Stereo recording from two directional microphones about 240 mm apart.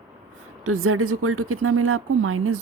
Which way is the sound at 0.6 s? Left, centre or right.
Right.